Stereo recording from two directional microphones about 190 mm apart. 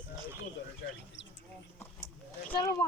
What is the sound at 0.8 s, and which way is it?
Bird, 70° left (ahead or behind).